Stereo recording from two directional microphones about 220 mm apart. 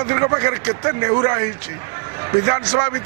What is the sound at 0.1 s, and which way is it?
A man's voice, 20° right (ahead or behind).